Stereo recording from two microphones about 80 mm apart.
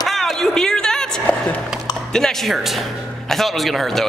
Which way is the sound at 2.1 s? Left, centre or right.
Centre.